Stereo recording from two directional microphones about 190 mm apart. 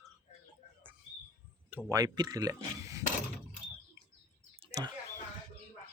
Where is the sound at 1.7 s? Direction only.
15° right (ahead or behind).